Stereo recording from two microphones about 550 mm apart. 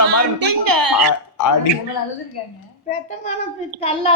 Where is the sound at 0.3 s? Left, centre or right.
Right.